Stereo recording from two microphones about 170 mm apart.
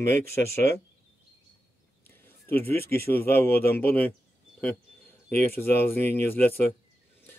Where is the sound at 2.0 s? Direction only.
10° left (ahead or behind).